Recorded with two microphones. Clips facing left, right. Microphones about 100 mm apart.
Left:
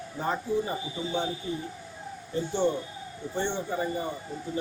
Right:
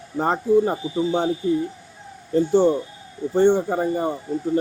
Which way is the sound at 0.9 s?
40° right (ahead or behind).